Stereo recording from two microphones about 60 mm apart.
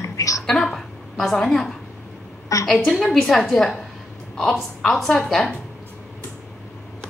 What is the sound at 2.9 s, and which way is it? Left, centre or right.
A woman's voice, centre.